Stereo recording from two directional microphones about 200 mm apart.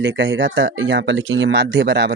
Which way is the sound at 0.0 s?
60° right (ahead or behind).